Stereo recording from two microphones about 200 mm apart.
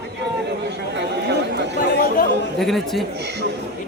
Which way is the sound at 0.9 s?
55° right (ahead or behind).